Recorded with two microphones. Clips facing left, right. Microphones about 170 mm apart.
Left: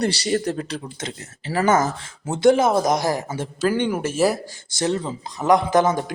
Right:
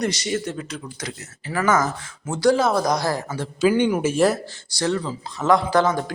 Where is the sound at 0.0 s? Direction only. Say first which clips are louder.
Left 3 dB; 35° left (ahead or behind); by 3.5 s 20° left (ahead or behind).